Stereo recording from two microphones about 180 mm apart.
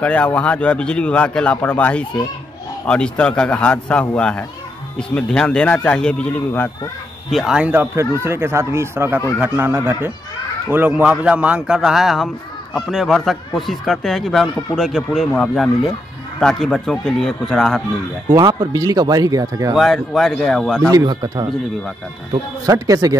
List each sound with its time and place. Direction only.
0.0 s a man's voice: 5° left (ahead or behind)
7.2 s speech: centre (ahead or behind)
18.3 s speech: 25° right (ahead or behind)
19.7 s speech: centre (ahead or behind)
20.8 s speech: 20° right (ahead or behind)